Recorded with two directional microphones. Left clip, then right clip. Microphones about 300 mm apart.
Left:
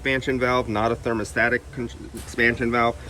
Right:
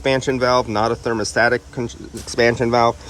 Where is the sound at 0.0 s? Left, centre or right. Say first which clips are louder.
Right 5 dB; centre.